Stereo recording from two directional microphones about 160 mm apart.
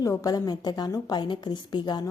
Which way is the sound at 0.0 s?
20° left (ahead or behind).